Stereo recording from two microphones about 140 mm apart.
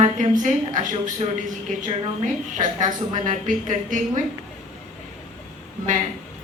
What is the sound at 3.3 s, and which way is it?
Speech, 65° right (ahead or behind).